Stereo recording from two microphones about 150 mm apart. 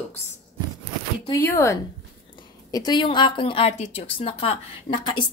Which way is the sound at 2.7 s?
30° left (ahead or behind).